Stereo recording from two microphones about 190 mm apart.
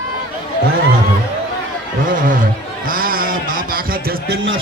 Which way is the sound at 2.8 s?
50° right (ahead or behind).